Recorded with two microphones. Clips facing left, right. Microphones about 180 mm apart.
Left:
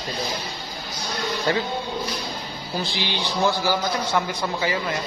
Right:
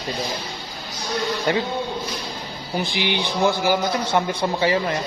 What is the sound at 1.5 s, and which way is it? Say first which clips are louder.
Speech: right 1 dB; 20° right (ahead or behind).